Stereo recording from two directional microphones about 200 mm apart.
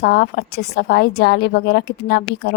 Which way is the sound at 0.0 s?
55° left (ahead or behind).